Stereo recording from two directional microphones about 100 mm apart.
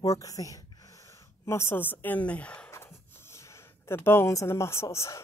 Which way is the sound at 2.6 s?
25° left (ahead or behind).